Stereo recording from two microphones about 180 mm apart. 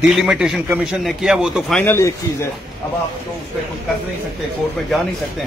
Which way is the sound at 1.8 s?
15° left (ahead or behind).